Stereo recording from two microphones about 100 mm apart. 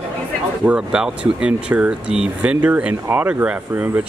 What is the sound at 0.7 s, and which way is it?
Speech, 10° right (ahead or behind).